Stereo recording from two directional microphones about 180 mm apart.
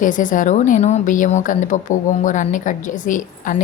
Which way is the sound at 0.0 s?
45° left (ahead or behind).